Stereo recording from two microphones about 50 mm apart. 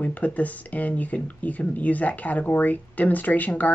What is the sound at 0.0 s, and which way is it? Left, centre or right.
Speech, left.